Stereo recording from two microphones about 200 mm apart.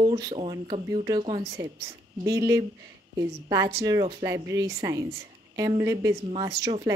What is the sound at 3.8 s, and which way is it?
A woman's voice, 20° right (ahead or behind).